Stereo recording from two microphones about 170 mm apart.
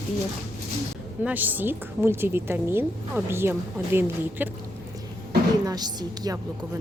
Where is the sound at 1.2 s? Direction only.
10° right (ahead or behind).